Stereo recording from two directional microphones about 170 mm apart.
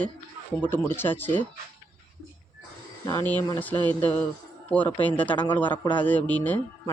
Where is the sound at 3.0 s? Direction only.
15° left (ahead or behind).